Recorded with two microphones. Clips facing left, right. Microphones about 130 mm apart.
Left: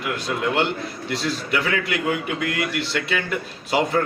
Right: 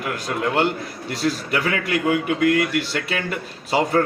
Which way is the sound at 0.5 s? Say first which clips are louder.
Right 2 dB; 40° right (ahead or behind).